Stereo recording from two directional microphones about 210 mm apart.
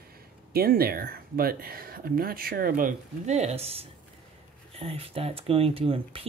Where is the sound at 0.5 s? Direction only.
45° right (ahead or behind).